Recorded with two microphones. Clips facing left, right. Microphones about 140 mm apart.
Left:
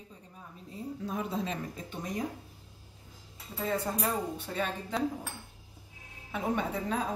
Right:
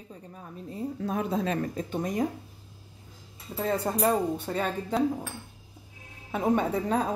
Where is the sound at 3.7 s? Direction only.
45° right (ahead or behind).